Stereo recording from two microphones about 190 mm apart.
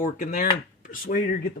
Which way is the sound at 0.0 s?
40° left (ahead or behind).